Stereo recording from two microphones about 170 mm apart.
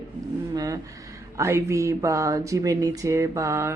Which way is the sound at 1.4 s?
15° right (ahead or behind).